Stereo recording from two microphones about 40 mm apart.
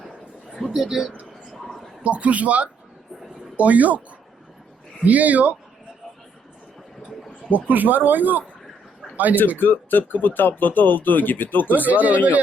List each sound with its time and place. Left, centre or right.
0.7 s speech: centre
1.5 s a sound: centre
2.0 s a man's voice: right
5.0 s a man's voice: right
7.5 s speech: right
9.6 s speech: left
11.9 s a man's voice: right